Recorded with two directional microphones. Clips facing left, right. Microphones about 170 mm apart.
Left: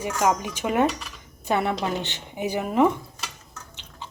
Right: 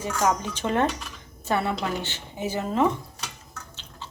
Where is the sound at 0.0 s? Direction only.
15° left (ahead or behind).